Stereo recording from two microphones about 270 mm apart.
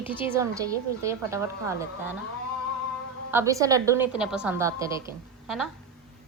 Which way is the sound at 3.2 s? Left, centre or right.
Centre.